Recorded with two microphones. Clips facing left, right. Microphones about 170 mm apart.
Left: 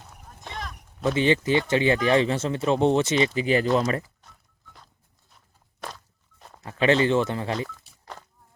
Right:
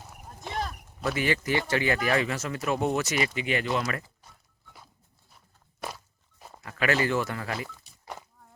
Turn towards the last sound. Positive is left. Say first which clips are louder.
# left 5 dB
turn(degrees=25)  # may be behind; listen again after turning